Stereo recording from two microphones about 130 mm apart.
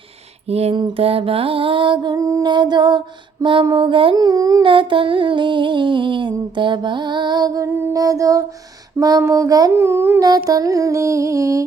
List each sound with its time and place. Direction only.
0.4 s a sound: 50° right (ahead or behind)
0.8 s music: 40° right (ahead or behind)
4.2 s music: 30° right (ahead or behind)
4.6 s music: 40° right (ahead or behind); by 10.2 s 20° right (ahead or behind)
10.2 s music: 30° right (ahead or behind)